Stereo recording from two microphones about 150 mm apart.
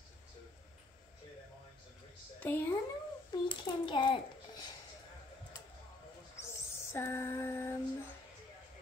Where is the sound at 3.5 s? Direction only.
35° left (ahead or behind).